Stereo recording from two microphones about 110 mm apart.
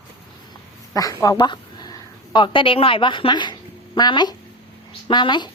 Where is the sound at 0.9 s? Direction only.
30° left (ahead or behind).